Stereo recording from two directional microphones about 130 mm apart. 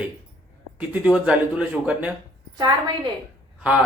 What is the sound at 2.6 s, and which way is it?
Speech, 35° right (ahead or behind).